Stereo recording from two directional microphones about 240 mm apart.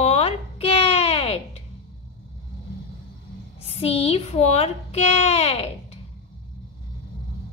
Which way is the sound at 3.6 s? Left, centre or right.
Left.